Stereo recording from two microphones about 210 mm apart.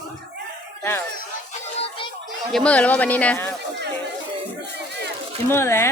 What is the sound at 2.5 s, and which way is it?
Speech, 5° left (ahead or behind).